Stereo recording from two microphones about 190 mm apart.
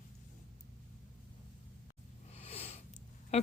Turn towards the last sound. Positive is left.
turn(degrees=35)  # may be behind; listen again after turning